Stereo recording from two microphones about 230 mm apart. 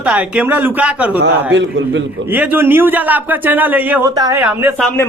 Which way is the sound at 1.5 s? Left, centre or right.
Right.